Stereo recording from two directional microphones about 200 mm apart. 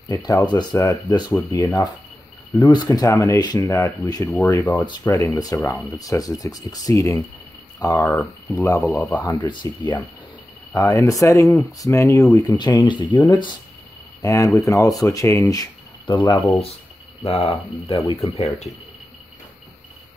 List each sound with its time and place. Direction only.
0.1 s speech: 15° left (ahead or behind)